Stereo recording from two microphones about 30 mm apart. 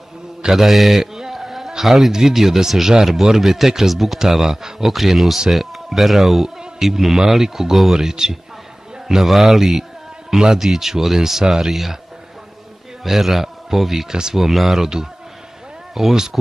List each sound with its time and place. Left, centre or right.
0.6 s speech: centre
1.3 s a sound: centre
1.9 s speech: centre
13.0 s a man's voice: centre
15.9 s speech: centre